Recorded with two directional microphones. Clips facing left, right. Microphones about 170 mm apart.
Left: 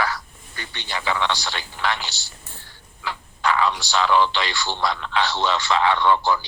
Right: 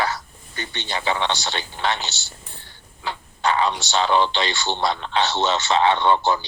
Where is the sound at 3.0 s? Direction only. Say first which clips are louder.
Right 1 dB; 25° right (ahead or behind).